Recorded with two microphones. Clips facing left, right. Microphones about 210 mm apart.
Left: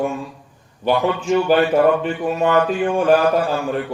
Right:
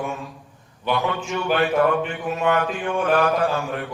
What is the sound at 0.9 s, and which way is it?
Speech, 35° left (ahead or behind).